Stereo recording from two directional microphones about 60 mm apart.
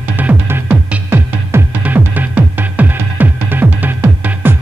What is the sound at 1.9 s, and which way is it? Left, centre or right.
Music, right.